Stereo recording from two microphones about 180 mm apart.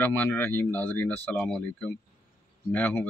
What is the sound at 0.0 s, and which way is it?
Speech, 10° left (ahead or behind).